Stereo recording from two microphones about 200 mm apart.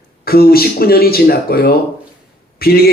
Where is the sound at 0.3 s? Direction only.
50° left (ahead or behind).